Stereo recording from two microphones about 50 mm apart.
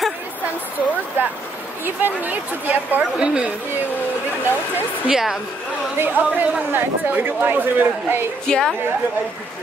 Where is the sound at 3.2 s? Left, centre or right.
Right.